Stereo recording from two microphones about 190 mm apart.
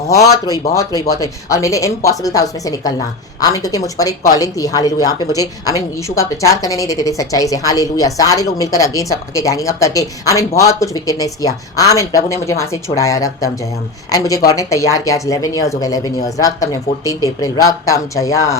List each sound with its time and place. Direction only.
0.3 s a woman's voice: 20° left (ahead or behind)